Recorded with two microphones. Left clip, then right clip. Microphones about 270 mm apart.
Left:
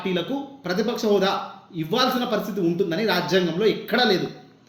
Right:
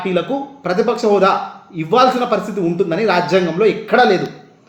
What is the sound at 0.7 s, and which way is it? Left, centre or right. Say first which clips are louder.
Speech: right 9 dB; right.